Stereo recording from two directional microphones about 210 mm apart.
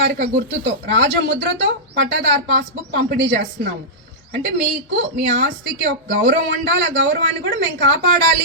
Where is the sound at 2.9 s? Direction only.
60° right (ahead or behind).